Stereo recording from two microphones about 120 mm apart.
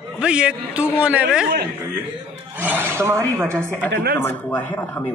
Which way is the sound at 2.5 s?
15° right (ahead or behind).